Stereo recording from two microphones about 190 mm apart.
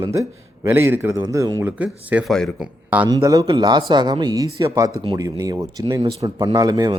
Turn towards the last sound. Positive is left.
turn(degrees=-20)  # may be behind; listen again after turning